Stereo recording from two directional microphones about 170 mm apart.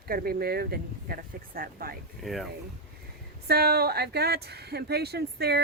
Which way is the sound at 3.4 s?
65° right (ahead or behind).